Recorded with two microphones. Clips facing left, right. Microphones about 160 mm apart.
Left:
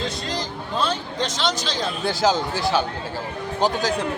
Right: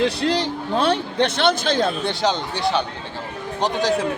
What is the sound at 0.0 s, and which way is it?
A man's voice, 75° right (ahead or behind).